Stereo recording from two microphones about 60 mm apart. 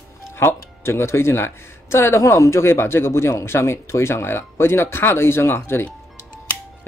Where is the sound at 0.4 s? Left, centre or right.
Left.